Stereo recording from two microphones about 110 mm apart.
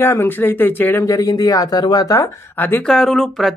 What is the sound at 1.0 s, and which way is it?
Speech, 30° left (ahead or behind).